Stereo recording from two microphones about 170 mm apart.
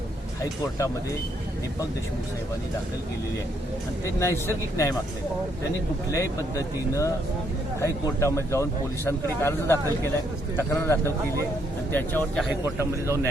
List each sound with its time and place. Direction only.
4.2 s speech: 15° left (ahead or behind)
6.1 s speech: 20° left (ahead or behind)
12.6 s a man's voice: 15° right (ahead or behind)